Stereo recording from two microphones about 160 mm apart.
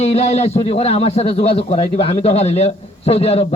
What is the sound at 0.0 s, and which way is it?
A man's voice, 40° left (ahead or behind).